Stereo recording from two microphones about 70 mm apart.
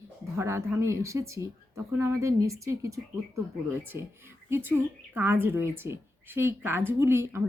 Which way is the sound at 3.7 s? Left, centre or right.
Right.